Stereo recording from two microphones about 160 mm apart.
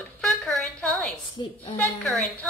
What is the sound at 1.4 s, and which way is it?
Speech, 30° left (ahead or behind).